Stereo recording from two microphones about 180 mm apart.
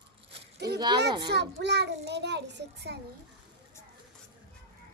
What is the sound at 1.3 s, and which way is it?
A child's voice, 70° right (ahead or behind).